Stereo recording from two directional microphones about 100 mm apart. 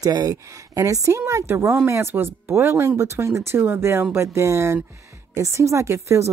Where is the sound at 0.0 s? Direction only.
40° right (ahead or behind).